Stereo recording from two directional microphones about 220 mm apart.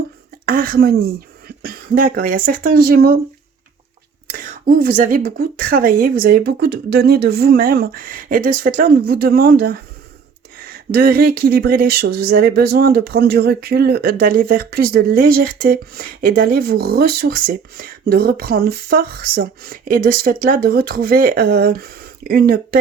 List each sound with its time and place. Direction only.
0.4 s speech: 40° right (ahead or behind)
4.3 s speech: 35° right (ahead or behind)
10.9 s speech: 45° right (ahead or behind)